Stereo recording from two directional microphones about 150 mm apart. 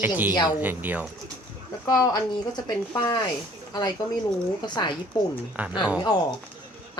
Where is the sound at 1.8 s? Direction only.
25° left (ahead or behind).